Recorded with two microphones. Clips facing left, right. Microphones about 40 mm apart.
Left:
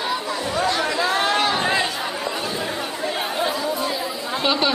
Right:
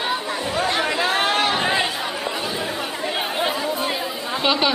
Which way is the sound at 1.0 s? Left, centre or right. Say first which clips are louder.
Left 1 dB; right.